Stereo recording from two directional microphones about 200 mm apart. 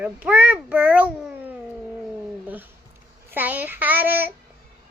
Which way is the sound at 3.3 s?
10° right (ahead or behind).